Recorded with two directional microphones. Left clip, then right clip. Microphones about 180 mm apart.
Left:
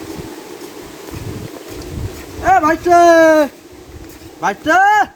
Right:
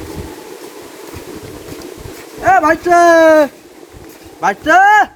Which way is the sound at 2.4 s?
5° right (ahead or behind).